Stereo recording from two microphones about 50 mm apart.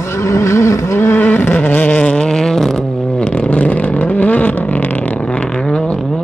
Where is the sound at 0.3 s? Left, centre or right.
Left.